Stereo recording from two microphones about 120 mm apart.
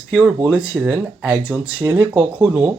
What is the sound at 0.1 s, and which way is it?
Speech, 10° right (ahead or behind).